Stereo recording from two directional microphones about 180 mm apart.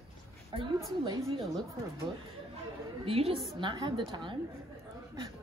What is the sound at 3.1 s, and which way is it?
A woman's voice, 30° right (ahead or behind).